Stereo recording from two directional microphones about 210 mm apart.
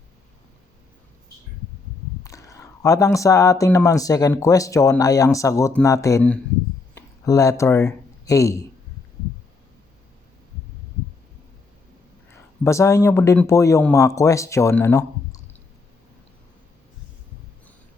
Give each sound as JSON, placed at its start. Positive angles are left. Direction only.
{"t": 2.2, "sound": "speech", "side_deg": 15}
{"t": 12.6, "sound": "speech", "side_deg": 15}